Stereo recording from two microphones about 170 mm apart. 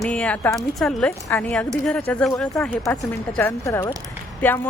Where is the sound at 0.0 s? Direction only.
5° left (ahead or behind).